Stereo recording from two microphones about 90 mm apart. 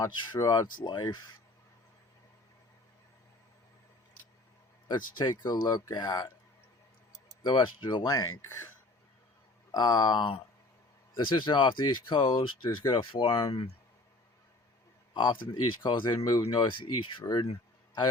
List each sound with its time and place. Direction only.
0.0 s speech: 40° left (ahead or behind)
4.9 s speech: 60° left (ahead or behind)
7.4 s speech: 60° left (ahead or behind)
9.7 s speech: 55° left (ahead or behind); by 13.7 s 80° left
15.1 s speech: 65° left (ahead or behind)